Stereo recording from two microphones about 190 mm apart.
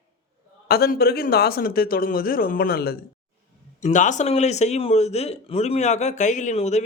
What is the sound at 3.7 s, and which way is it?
A man's voice, 40° left (ahead or behind).